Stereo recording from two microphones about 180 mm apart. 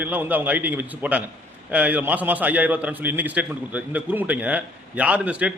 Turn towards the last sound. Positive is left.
turn(degrees=-5)  # may be behind; listen again after turning